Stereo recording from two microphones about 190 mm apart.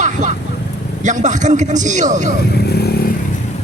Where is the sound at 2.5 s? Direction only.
60° left (ahead or behind).